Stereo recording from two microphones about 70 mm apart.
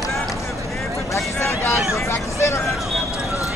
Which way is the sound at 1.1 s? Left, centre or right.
Left.